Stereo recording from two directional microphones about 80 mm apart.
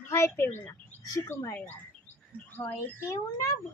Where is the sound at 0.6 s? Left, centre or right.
Left.